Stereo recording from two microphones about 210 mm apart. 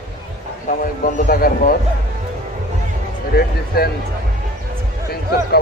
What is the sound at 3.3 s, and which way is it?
Speech, 45° left (ahead or behind).